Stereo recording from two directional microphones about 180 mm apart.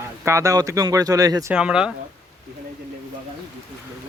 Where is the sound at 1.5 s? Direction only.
5° right (ahead or behind).